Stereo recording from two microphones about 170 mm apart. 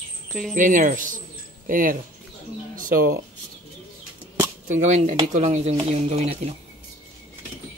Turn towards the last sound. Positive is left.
turn(degrees=-40)  # may be behind; listen again after turning